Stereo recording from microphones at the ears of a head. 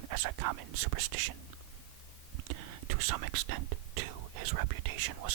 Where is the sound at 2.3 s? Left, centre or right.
Right.